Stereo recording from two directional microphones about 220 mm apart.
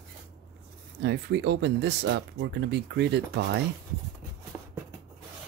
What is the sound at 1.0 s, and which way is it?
Speech, 50° right (ahead or behind).